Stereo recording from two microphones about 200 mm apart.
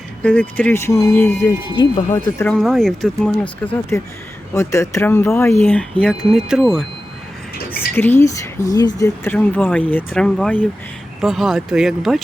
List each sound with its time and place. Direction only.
0.2 s speech: 5° left (ahead or behind); by 2.1 s 25° left (ahead or behind)
2.4 s speech: 5° left (ahead or behind)
4.5 s speech: 15° left (ahead or behind)
7.9 s speech: 10° left (ahead or behind)